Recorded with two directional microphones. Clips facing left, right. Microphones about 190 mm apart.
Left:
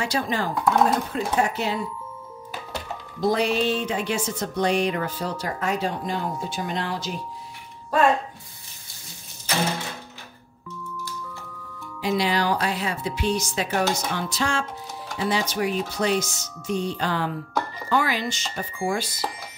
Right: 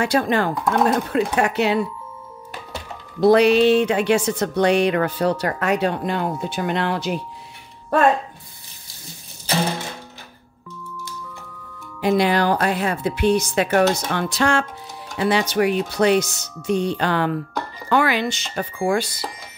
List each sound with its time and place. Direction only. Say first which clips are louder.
0.0 s speech: right 6 dB; 55° right (ahead or behind)
3.2 s speech: right 9 dB; 70° right (ahead or behind)
12.0 s speech: right 5 dB; 55° right (ahead or behind)